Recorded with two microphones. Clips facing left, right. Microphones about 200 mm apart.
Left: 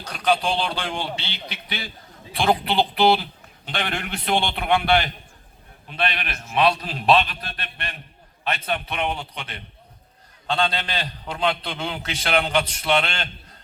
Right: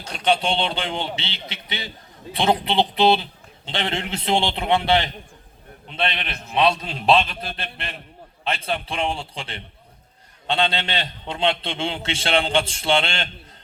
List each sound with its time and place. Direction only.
0.0 s a man's voice: 25° right (ahead or behind)